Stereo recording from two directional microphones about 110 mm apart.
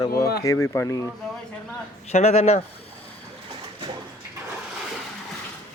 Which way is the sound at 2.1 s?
90° left.